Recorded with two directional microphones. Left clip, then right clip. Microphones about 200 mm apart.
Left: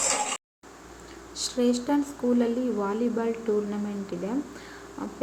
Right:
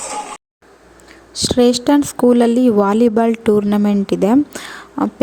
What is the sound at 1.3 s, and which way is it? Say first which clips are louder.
Speech: right 13 dB; 45° right (ahead or behind).